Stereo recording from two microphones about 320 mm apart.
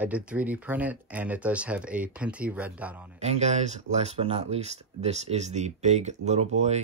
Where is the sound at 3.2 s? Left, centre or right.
Right.